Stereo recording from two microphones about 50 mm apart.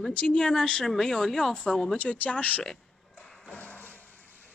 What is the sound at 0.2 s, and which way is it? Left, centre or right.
A woman's voice, centre.